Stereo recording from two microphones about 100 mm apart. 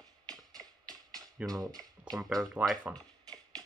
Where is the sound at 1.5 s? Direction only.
40° right (ahead or behind).